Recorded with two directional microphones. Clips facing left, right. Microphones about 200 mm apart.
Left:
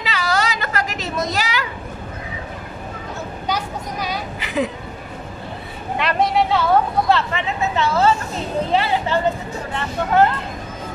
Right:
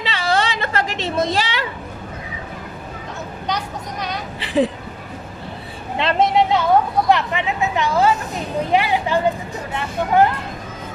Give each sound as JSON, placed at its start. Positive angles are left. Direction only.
{"t": 0.0, "sound": "a sound", "side_deg": -30}
{"t": 3.4, "sound": "vehicle", "side_deg": 5}
{"t": 4.4, "sound": "speech", "side_deg": -30}
{"t": 5.9, "sound": "speech", "side_deg": -25}